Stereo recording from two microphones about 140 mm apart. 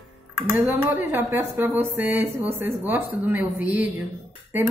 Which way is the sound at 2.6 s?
15° right (ahead or behind).